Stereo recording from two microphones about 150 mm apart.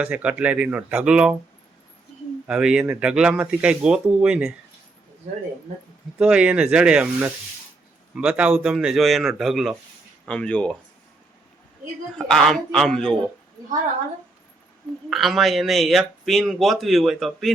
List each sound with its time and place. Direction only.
0.0 s speech: 10° right (ahead or behind)
2.5 s speech: 5° right (ahead or behind)
6.1 s speech: 5° right (ahead or behind)
12.1 s speech: 5° left (ahead or behind)
15.1 s speech: centre (ahead or behind)